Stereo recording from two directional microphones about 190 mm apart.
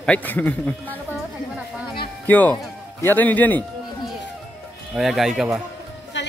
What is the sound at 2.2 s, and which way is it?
Speech, 10° left (ahead or behind).